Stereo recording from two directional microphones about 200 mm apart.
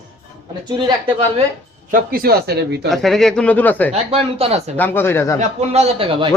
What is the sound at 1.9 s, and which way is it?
Speech, 45° right (ahead or behind).